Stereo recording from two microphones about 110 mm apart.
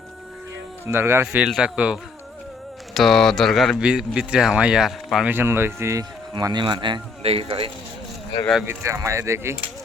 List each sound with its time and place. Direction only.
0.9 s speech: 20° right (ahead or behind)
2.9 s speech: centre (ahead or behind)
5.2 s speech: 20° right (ahead or behind)
6.3 s a man's voice: 40° right (ahead or behind)
7.2 s speech: 65° right (ahead or behind)
8.6 s speech: 25° right (ahead or behind)